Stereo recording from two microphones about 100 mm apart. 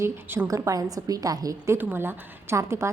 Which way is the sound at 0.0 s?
20° right (ahead or behind).